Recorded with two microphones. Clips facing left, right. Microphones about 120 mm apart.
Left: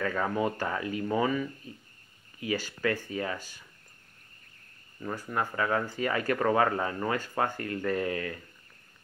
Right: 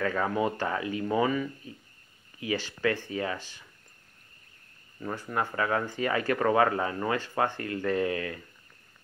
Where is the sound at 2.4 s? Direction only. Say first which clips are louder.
Even; 40° left (ahead or behind).